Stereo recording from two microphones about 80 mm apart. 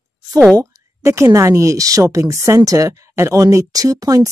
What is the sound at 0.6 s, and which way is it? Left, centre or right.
Speech, right.